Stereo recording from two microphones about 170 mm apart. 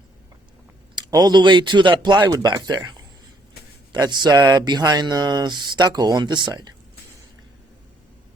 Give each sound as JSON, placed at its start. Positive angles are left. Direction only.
{"t": 0.9, "sound": "speech", "side_deg": -25}